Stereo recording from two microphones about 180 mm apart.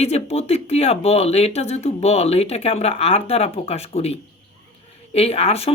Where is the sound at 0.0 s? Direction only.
35° left (ahead or behind).